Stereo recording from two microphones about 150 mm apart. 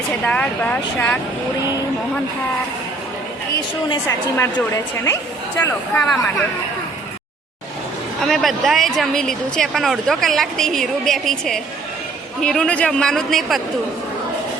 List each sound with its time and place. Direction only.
0.3 s speech: 10° left (ahead or behind)
4.4 s speech: 20° left (ahead or behind)
8.3 s speech: centre (ahead or behind)